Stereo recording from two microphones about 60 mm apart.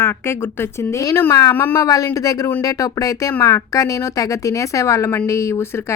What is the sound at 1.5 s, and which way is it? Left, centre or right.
Speech, left.